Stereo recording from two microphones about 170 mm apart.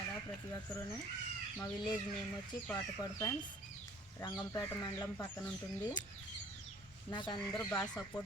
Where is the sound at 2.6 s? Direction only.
20° left (ahead or behind).